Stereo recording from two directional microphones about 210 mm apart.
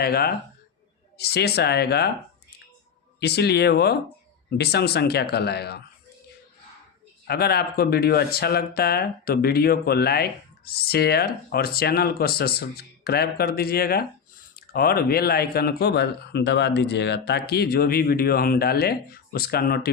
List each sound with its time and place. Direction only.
0.0 s speech: 45° left (ahead or behind)
3.2 s speech: 50° left (ahead or behind)
7.3 s speech: 50° left (ahead or behind)